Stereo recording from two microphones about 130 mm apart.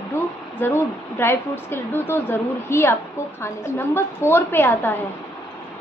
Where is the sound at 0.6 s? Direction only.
20° left (ahead or behind).